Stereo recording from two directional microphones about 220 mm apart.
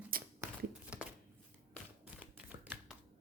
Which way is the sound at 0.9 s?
5° right (ahead or behind).